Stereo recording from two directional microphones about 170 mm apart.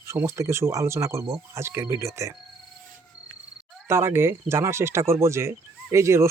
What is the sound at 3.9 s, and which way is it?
Speech, 15° right (ahead or behind).